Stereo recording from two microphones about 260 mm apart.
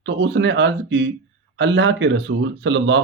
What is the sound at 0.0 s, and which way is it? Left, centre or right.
Speech, right.